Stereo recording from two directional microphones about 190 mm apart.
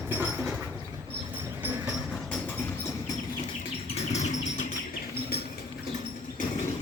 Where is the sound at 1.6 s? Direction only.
10° right (ahead or behind).